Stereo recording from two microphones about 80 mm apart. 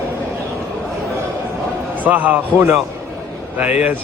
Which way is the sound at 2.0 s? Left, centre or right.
Right.